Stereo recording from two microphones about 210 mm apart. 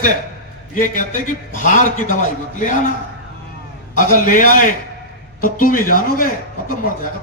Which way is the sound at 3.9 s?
40° left (ahead or behind).